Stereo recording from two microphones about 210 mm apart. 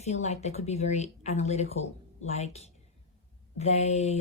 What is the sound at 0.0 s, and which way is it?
Speech, 30° left (ahead or behind).